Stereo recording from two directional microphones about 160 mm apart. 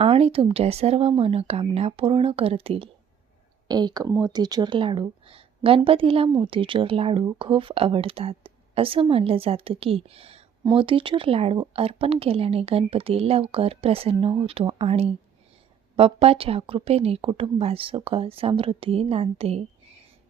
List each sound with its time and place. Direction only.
0.0 s speech: 35° right (ahead or behind)
3.7 s speech: 25° right (ahead or behind)